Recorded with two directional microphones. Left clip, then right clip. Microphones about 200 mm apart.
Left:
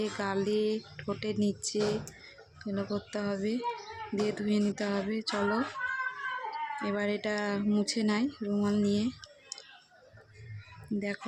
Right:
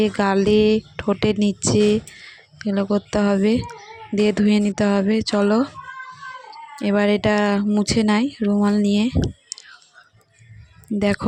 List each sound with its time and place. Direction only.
0.0 s speech: 45° right (ahead or behind)